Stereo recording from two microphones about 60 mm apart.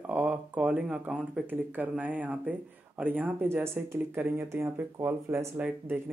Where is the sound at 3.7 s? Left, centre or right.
Right.